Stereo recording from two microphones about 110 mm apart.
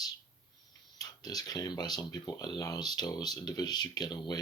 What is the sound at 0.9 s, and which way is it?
Speech, 35° left (ahead or behind).